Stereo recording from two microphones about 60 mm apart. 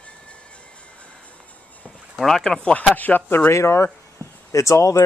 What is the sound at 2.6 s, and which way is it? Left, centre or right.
Speech, left.